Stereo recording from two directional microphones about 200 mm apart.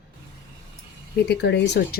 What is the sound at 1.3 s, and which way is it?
Speech, 60° left (ahead or behind).